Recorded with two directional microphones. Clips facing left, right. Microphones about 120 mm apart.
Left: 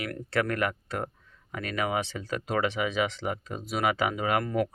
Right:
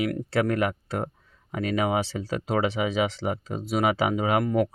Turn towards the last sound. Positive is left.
turn(degrees=-25)  # may be behind; listen again after turning